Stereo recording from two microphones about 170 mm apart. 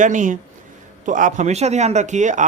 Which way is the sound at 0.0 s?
50° right (ahead or behind).